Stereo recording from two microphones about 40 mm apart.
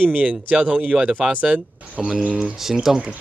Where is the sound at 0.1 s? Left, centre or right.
Right.